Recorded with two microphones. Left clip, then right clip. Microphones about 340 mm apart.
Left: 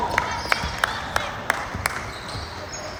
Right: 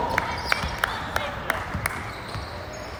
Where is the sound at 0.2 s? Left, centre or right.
Left.